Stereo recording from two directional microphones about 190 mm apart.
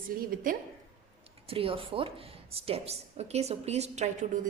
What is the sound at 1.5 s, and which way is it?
Speech, 30° right (ahead or behind).